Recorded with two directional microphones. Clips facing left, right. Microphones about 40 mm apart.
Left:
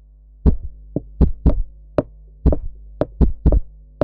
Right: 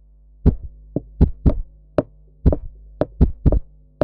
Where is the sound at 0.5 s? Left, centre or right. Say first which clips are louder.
Even; centre.